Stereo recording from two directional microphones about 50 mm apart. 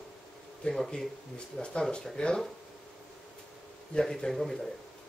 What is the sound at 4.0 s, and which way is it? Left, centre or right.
Speech, centre.